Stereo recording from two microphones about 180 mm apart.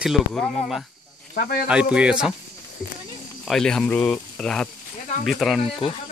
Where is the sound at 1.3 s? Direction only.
50° left (ahead or behind).